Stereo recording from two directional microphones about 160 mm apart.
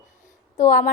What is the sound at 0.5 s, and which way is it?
Speech, 50° left (ahead or behind).